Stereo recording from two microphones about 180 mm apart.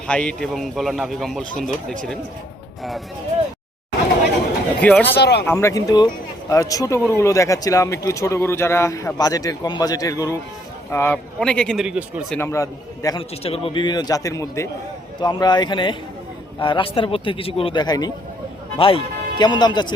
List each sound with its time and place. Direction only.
0.1 s a man's voice: 5° left (ahead or behind)
4.8 s a man's voice: 10° left (ahead or behind)
5.0 s speech: 65° left (ahead or behind)
5.5 s a man's voice: 15° left (ahead or behind); by 12.2 s 5° right (ahead or behind)
12.3 s a man's voice: 15° left (ahead or behind)
13.4 s a man's voice: 35° left (ahead or behind)